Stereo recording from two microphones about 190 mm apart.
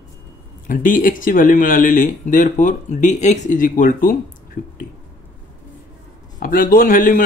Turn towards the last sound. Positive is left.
turn(degrees=45)  # may be behind; listen again after turning